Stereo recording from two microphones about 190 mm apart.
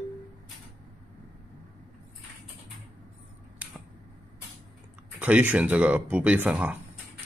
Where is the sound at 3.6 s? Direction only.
5° right (ahead or behind).